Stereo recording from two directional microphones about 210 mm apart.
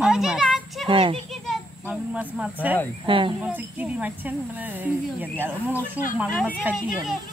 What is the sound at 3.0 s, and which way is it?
Speech, 25° right (ahead or behind).